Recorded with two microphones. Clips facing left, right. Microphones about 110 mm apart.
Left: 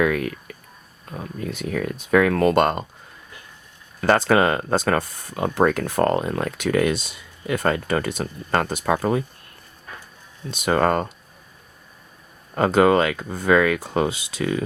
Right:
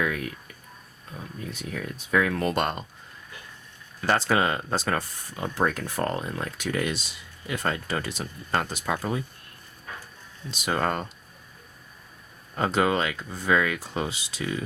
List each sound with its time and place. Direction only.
0.0 s speech: 70° left (ahead or behind)
4.0 s speech: 65° left (ahead or behind)
10.5 s speech: 60° left (ahead or behind)
12.5 s speech: 60° left (ahead or behind)